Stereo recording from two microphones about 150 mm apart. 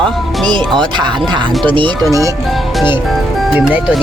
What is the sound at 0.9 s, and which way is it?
Speech, 30° right (ahead or behind).